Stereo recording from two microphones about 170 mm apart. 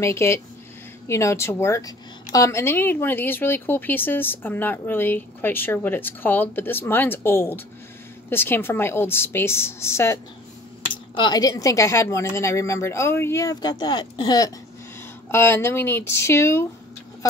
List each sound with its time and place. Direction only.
0.0 s a woman's voice: 15° left (ahead or behind)
10.9 s speech: 25° left (ahead or behind)